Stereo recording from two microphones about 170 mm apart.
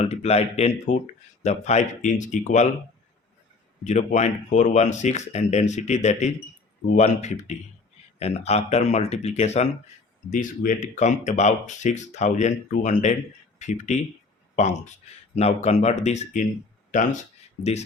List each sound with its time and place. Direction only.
0.0 s speech: 40° left (ahead or behind)
3.8 s speech: 45° left (ahead or behind)